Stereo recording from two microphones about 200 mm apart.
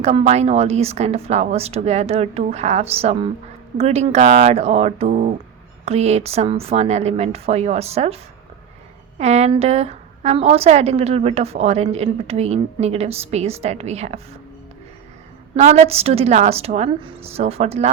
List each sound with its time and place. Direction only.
0.0 s a woman's voice: 30° right (ahead or behind)
15.5 s a woman's voice: 35° right (ahead or behind)